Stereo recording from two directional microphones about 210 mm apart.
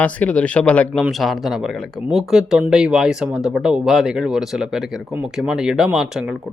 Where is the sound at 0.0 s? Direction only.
5° left (ahead or behind).